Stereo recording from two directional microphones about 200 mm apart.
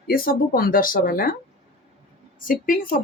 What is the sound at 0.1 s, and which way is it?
Speech, 45° left (ahead or behind).